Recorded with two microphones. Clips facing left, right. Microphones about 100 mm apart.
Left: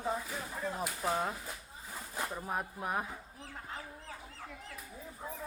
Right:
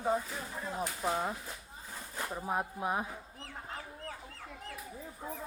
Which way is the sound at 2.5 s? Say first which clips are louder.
Right 6 dB; 20° right (ahead or behind).